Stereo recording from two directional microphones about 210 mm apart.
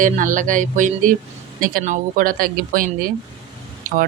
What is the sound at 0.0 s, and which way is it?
Speech, 40° right (ahead or behind).